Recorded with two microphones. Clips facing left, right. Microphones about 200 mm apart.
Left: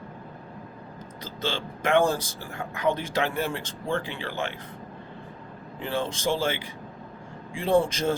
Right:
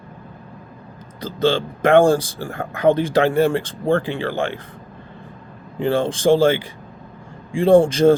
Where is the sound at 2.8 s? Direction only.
30° right (ahead or behind).